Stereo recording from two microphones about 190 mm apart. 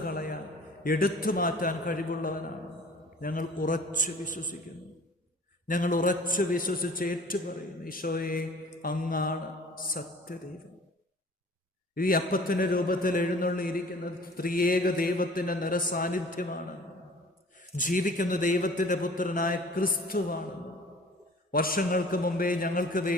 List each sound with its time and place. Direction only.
0.0 s a sound: 50° left (ahead or behind)
0.9 s a man's voice: 50° left (ahead or behind)
5.6 s a man's voice: 45° left (ahead or behind)
11.9 s a man's voice: 50° left (ahead or behind)
17.7 s a man's voice: 45° left (ahead or behind)
21.5 s a man's voice: 50° left (ahead or behind)